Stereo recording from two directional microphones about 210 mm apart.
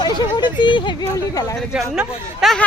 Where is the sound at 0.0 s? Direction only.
20° left (ahead or behind).